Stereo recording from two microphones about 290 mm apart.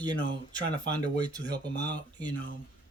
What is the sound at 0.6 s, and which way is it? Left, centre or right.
Speech, right.